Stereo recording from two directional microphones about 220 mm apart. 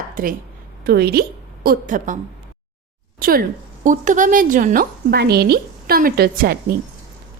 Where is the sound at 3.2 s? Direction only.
40° right (ahead or behind).